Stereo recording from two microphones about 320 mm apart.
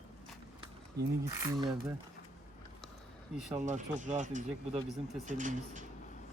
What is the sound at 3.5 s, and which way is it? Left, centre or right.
Speech, right.